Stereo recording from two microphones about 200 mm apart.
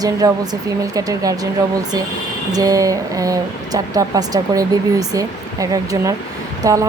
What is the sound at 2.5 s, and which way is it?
Speech, 20° right (ahead or behind).